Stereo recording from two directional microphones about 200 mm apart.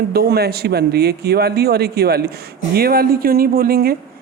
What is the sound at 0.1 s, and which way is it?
Speech, 50° right (ahead or behind).